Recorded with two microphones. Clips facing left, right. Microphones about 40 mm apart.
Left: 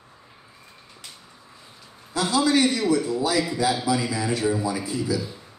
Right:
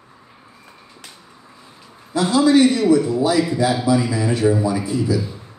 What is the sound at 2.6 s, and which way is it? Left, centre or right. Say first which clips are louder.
A man's voice: right 7 dB; right.